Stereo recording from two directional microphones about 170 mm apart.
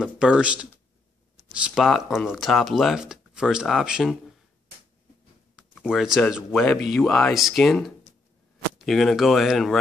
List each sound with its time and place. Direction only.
0.0 s speech: 5° right (ahead or behind)
5.6 s speech: centre (ahead or behind)